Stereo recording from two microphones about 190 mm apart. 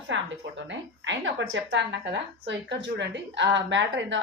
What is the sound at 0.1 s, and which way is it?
A woman's voice, 75° right (ahead or behind).